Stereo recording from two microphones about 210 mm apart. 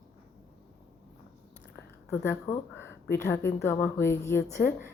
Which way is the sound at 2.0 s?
10° left (ahead or behind).